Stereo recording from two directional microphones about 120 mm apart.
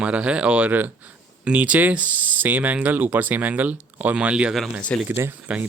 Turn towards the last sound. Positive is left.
turn(degrees=-15)  # may be behind; listen again after turning